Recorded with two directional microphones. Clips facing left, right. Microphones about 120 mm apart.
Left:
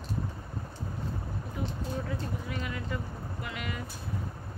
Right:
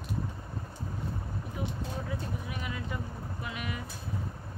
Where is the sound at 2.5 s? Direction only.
15° right (ahead or behind).